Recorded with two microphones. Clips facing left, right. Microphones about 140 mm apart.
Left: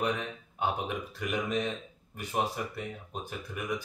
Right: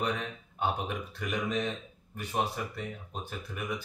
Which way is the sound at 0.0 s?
10° left (ahead or behind).